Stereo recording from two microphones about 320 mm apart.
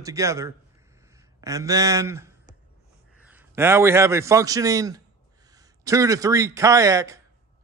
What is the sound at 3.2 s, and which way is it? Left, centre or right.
A man's voice, centre.